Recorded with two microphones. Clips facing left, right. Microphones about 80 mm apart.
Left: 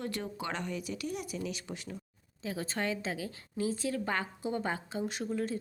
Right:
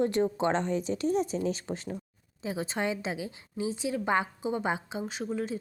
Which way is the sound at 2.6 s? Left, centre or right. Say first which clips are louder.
Right 3 dB; centre.